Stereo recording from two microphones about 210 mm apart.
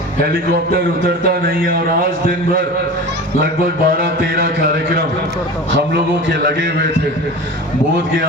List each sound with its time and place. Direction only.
1.6 s a man's voice: 40° right (ahead or behind)
3.8 s music: 45° right (ahead or behind)